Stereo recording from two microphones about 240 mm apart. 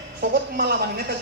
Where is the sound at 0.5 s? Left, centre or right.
Right.